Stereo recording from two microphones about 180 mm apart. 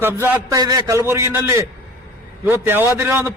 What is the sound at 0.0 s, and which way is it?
A man's voice, 10° right (ahead or behind).